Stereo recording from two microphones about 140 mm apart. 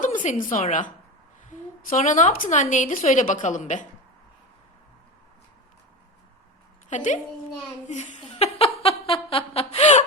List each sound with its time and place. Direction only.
0.0 s a woman's voice: 65° left (ahead or behind)
6.9 s a woman's voice: 60° left (ahead or behind)
8.2 s a sound: 40° left (ahead or behind)